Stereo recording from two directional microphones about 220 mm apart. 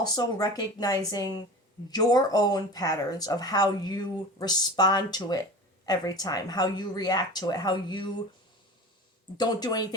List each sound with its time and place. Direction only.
0.0 s a woman's voice: 15° left (ahead or behind)
9.4 s speech: 20° left (ahead or behind)